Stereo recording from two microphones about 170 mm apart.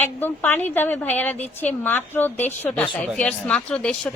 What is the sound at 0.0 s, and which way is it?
A woman's voice, 10° left (ahead or behind).